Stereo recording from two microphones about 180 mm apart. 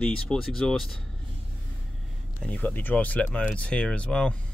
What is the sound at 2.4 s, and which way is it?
Speech, 10° left (ahead or behind).